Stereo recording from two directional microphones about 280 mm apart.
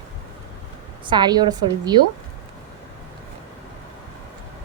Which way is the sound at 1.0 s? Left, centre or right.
Centre.